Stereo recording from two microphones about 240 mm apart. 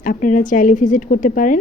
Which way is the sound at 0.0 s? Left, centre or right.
Left.